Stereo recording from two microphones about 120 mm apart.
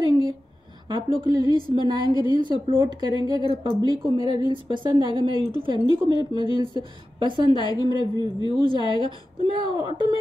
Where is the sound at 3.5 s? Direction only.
45° right (ahead or behind).